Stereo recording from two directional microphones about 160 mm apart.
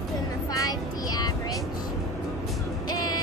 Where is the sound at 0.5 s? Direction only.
25° left (ahead or behind).